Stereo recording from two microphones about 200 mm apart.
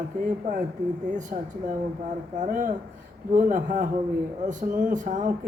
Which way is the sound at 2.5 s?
40° right (ahead or behind).